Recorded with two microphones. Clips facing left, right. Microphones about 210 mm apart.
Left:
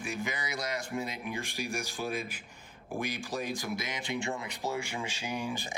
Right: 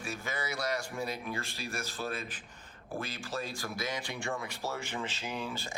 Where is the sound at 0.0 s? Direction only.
15° left (ahead or behind).